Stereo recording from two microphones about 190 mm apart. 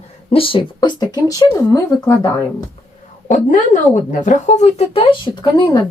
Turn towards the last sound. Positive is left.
turn(degrees=25)  # may be behind; listen again after turning